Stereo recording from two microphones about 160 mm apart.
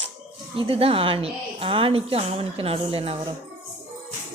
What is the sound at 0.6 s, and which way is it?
A woman's voice, 35° right (ahead or behind).